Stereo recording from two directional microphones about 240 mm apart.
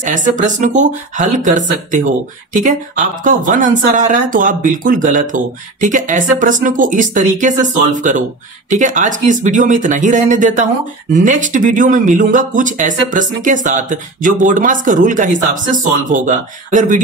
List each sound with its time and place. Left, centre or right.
0.0 s speech: right